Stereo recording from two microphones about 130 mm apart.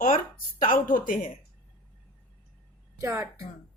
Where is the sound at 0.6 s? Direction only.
90° left.